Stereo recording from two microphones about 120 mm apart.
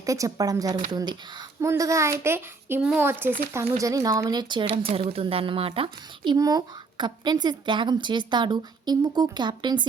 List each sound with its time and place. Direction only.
0.0 s a child's voice: 30° right (ahead or behind); by 6.3 s 50° right (ahead or behind)
6.3 s speech: 30° right (ahead or behind)